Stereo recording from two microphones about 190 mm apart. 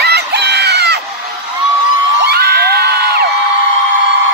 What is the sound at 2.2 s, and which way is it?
Crowd, 55° right (ahead or behind).